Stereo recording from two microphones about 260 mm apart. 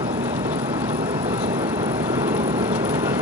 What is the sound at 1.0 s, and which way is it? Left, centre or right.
Vehicle, centre.